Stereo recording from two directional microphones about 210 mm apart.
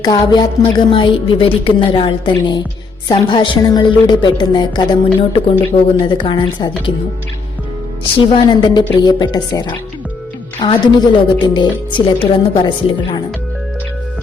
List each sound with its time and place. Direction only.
0.0 s a woman's voice: 20° left (ahead or behind)
8.2 s a woman's voice: 20° left (ahead or behind)